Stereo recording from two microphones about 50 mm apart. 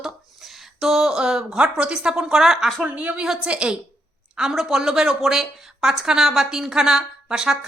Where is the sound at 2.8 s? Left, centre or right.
Right.